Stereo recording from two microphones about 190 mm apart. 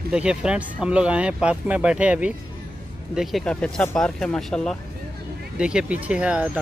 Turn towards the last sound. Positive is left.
turn(degrees=-5)  # may be behind; listen again after turning